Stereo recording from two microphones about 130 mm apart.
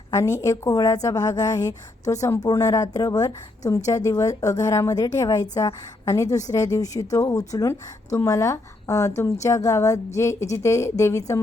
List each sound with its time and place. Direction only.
0.1 s a woman's voice: 25° left (ahead or behind)